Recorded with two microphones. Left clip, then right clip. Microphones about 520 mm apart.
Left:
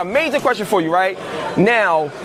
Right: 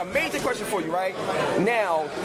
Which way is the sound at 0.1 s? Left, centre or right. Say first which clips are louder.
Left 10 dB; left.